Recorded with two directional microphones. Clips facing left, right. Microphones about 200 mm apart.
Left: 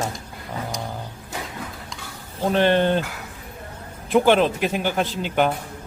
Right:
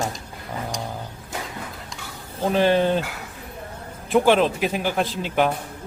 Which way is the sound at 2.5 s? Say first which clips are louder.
Even; 5° right (ahead or behind).